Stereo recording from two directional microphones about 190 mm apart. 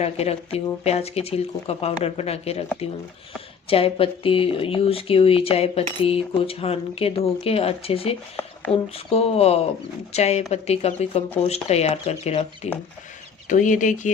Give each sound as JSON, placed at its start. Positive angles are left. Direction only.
{"t": 0.0, "sound": "speech", "side_deg": 30}
{"t": 3.7, "sound": "speech", "side_deg": 30}